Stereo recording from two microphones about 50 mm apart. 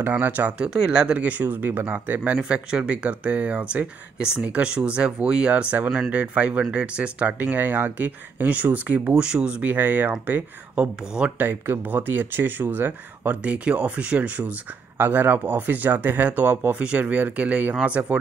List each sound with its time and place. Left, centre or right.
0.1 s speech: right
0.6 s speech: right
1.4 s speech: right
2.4 s speech: centre
5.9 s speech: centre
6.1 s speech: right
9.2 s speech: centre; by 10.9 s right
11.2 s speech: right
11.9 s speech: right
13.4 s speech: right
15.0 s speech: right